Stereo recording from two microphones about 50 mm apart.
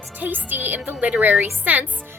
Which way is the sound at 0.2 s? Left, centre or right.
Right.